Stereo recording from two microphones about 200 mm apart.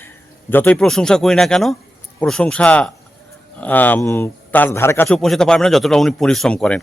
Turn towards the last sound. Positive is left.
turn(degrees=5)  # may be behind; listen again after turning